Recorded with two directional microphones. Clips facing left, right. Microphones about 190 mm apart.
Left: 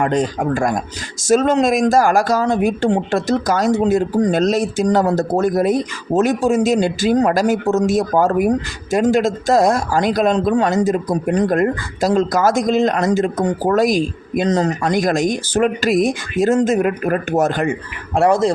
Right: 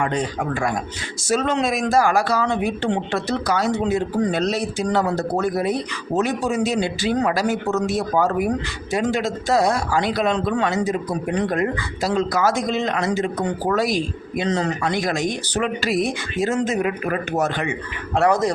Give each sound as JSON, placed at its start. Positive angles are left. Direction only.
{"t": 0.0, "sound": "a man's voice", "side_deg": 40}
{"t": 18.2, "sound": "speech", "side_deg": 25}